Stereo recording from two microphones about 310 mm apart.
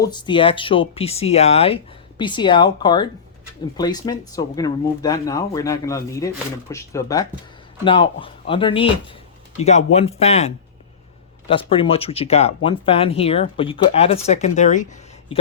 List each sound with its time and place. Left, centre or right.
0.0 s speech: centre